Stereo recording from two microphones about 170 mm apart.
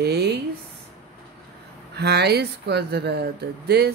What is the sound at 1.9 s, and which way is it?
A woman's voice, 75° right (ahead or behind).